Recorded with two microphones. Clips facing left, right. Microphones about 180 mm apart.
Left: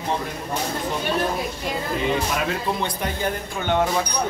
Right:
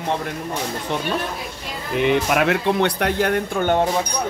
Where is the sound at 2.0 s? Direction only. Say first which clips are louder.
Right 8 dB; 70° right (ahead or behind).